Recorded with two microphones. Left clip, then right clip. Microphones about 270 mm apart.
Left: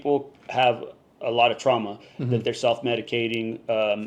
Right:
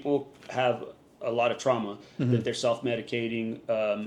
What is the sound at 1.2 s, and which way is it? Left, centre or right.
Speech, left.